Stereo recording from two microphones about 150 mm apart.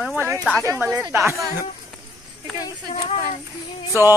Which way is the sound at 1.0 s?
20° right (ahead or behind).